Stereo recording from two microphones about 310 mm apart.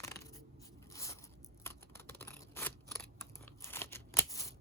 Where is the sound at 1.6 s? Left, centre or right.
Centre.